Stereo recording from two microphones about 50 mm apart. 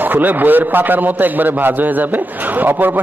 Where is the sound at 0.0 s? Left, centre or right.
Right.